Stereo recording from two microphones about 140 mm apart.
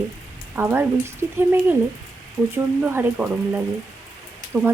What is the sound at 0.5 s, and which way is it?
Speech, 15° right (ahead or behind).